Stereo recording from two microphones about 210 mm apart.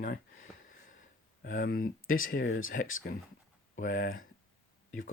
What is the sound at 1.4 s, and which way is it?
Speech, 40° left (ahead or behind).